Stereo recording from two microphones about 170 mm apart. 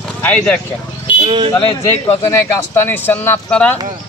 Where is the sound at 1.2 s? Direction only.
30° right (ahead or behind).